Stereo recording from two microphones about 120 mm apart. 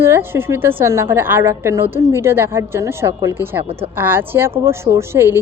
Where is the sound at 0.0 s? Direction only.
20° right (ahead or behind).